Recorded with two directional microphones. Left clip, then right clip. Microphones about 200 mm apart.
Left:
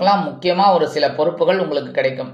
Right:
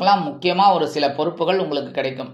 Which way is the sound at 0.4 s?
25° right (ahead or behind).